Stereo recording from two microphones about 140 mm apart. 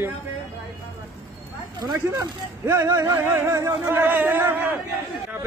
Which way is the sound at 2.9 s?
25° right (ahead or behind).